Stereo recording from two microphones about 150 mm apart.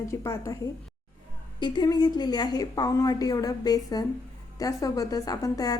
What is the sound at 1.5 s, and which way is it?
A woman's voice, 30° left (ahead or behind).